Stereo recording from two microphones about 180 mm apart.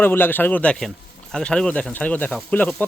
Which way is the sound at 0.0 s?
10° left (ahead or behind).